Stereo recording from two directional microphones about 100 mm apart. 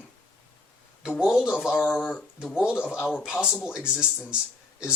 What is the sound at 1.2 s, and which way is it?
Speech, 5° right (ahead or behind).